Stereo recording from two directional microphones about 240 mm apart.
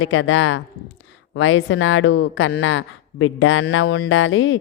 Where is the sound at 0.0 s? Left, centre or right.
Left.